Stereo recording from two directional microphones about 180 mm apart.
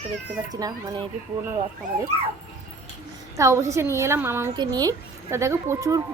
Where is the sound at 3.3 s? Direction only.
15° right (ahead or behind).